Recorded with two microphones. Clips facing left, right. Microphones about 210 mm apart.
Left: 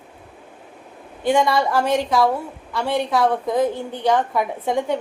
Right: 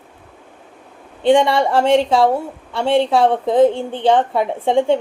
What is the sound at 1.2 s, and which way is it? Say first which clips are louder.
A woman's voice: right 5 dB; 30° right (ahead or behind).